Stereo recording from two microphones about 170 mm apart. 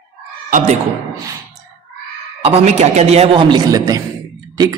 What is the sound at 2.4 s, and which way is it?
A man's voice, 35° right (ahead or behind).